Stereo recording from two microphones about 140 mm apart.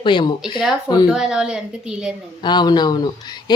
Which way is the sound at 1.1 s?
5° right (ahead or behind).